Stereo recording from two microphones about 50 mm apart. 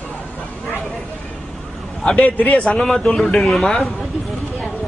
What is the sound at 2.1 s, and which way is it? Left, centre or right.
Speech, left.